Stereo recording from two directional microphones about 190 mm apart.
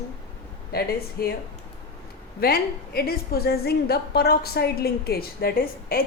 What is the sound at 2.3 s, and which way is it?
A woman's voice, 55° left (ahead or behind).